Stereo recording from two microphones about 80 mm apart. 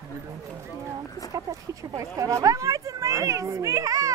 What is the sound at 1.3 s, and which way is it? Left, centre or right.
Speech, right.